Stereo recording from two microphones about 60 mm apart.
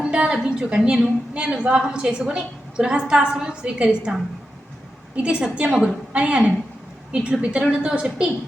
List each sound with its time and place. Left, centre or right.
0.0 s a woman's voice: centre